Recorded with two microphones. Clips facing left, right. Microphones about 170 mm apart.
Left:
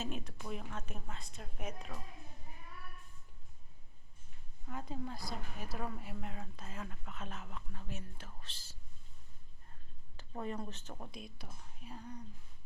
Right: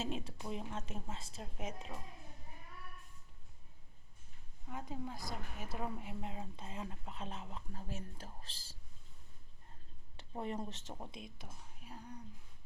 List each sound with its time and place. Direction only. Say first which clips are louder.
0.0 s speech: right 1 dB; 30° right (ahead or behind)
4.7 s a woman's voice: left 1 dB; 15° right (ahead or behind); by 8.5 s 35° right (ahead or behind)
10.2 s a woman's voice: even; 25° right (ahead or behind)
11.4 s a woman's voice: left 2 dB; 10° right (ahead or behind)